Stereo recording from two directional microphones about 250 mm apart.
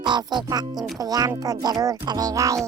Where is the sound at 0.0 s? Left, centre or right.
Centre.